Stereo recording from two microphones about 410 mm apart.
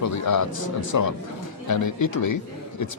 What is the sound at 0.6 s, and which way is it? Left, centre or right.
Speech, left.